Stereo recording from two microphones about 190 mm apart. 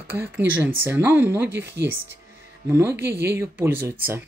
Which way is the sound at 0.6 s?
10° right (ahead or behind).